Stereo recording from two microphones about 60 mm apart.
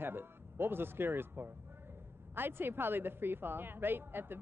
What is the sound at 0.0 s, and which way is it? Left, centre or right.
A woman's voice, right.